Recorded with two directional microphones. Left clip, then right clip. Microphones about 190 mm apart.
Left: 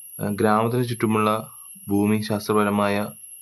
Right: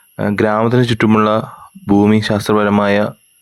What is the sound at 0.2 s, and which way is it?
Speech, 35° right (ahead or behind).